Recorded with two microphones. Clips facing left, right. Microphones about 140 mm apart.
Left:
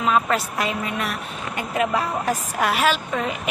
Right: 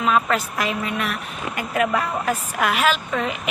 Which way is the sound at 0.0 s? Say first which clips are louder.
Even; 30° left (ahead or behind).